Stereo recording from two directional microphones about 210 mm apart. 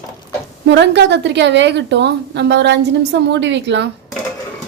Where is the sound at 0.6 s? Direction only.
55° right (ahead or behind).